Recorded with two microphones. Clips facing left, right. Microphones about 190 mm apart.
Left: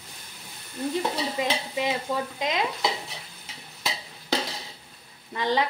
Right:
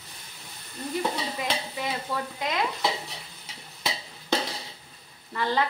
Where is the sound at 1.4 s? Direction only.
20° left (ahead or behind).